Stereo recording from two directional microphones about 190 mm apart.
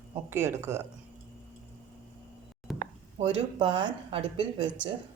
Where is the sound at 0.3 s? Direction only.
15° right (ahead or behind).